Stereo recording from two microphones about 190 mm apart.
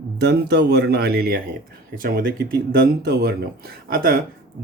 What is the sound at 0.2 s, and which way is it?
Speech, 60° right (ahead or behind).